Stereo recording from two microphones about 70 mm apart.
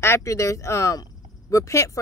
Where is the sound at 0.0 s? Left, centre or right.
Left.